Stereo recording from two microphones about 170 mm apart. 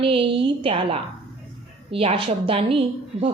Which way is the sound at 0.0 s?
30° right (ahead or behind).